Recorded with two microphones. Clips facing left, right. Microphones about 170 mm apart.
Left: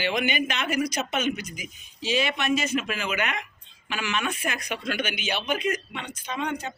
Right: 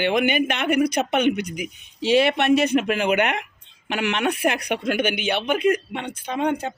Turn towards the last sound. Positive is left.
turn(degrees=-55)  # may be behind; listen again after turning